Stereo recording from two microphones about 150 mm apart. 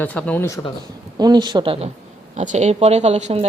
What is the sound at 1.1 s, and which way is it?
Speech, 25° right (ahead or behind).